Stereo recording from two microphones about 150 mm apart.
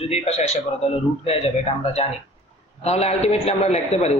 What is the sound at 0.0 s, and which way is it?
A man's voice, 45° left (ahead or behind).